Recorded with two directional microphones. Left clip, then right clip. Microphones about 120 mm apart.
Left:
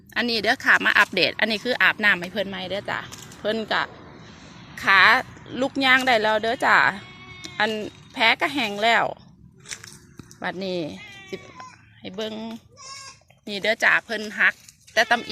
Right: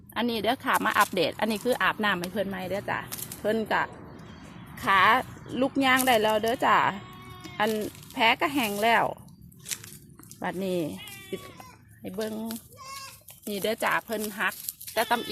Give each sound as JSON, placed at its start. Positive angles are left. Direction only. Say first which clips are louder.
{"t": 0.1, "sound": "a woman's voice", "louder": "left 5 dB", "side_deg": 10}
{"t": 4.8, "sound": "a woman's voice", "louder": "left 5 dB", "side_deg": -15}
{"t": 10.6, "sound": "a woman's voice", "louder": "even", "side_deg": -10}
{"t": 12.0, "sound": "a woman's voice", "louder": "left 2 dB", "side_deg": -5}
{"t": 13.6, "sound": "a woman's voice", "louder": "left 7 dB", "side_deg": -10}
{"t": 14.3, "sound": "speech", "louder": "left 9 dB", "side_deg": 10}